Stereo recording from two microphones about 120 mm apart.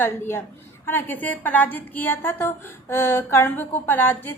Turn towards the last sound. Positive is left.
turn(degrees=15)  # may be behind; listen again after turning